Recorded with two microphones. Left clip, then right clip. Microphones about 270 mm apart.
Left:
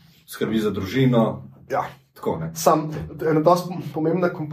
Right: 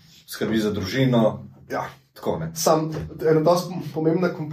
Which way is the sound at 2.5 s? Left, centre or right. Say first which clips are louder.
Left 2 dB; left.